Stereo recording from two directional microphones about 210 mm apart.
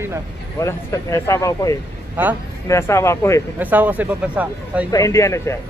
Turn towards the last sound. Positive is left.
turn(degrees=15)  # may be behind; listen again after turning